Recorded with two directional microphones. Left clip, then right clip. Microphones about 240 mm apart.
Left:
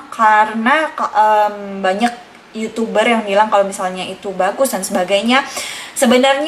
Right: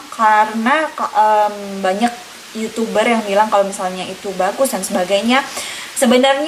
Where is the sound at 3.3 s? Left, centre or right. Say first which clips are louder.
Left 1 dB; centre.